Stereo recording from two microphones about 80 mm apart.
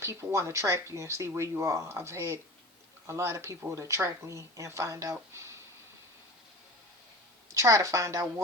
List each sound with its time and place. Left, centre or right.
0.0 s speech: right
5.3 s a sound: right
7.5 s speech: right